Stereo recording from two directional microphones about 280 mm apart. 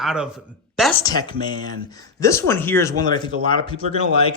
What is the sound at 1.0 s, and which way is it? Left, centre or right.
A man's voice, centre.